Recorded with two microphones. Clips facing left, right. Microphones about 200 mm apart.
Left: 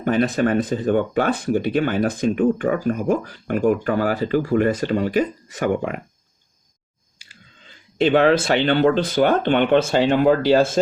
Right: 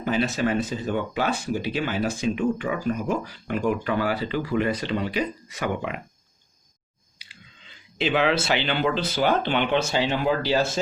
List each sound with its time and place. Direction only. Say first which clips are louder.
0.0 s speech: left 5 dB; 55° left (ahead or behind)
7.2 s speech: left 1 dB; 45° left (ahead or behind)